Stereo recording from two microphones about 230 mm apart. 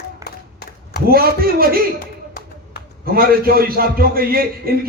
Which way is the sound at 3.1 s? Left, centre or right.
Right.